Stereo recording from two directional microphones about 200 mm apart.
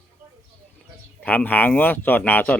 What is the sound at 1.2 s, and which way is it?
Speech, 10° left (ahead or behind).